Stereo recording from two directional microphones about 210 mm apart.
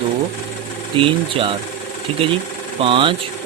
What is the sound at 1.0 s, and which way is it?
Speech, 25° right (ahead or behind).